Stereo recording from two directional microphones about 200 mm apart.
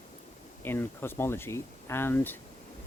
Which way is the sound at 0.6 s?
10° left (ahead or behind).